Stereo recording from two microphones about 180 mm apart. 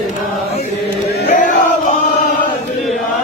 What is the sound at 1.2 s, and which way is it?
Chant, 45° left (ahead or behind).